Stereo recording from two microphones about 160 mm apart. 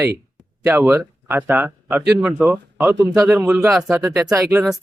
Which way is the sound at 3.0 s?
20° right (ahead or behind).